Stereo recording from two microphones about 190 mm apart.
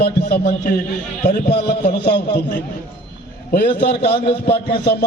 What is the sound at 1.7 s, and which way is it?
Speech, 60° left (ahead or behind).